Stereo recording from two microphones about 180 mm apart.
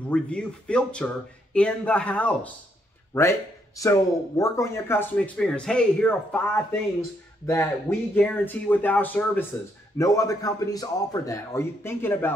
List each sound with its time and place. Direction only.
0.1 s a man's voice: 5° left (ahead or behind)